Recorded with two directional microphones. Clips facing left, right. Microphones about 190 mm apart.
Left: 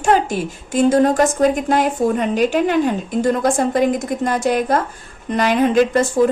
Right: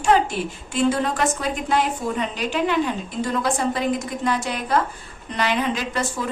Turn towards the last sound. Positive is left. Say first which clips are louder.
# left 11 dB
turn(degrees=45)  # may be behind; listen again after turning